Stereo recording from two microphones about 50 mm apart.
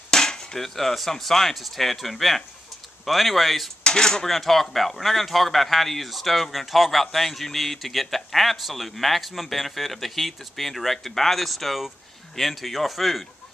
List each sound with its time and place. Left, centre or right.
0.1 s speech: centre
3.8 s speech: centre